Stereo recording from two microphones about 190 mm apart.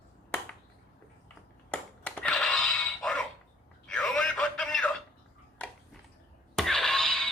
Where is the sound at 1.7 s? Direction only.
5° left (ahead or behind).